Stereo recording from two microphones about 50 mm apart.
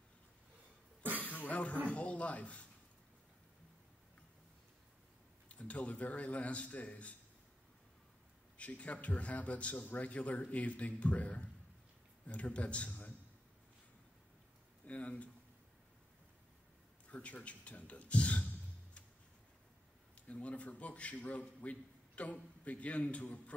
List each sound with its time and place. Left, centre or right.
1.2 s a sound: left
1.9 s a man's voice: left
5.5 s a man's voice: left
8.5 s a man's voice: left
14.9 s a man's voice: left
17.1 s a man's voice: left
20.2 s a man's voice: left